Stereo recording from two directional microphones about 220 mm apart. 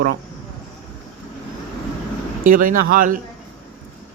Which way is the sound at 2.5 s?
40° right (ahead or behind).